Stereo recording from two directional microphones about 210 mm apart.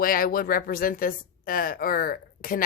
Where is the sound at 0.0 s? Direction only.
45° left (ahead or behind).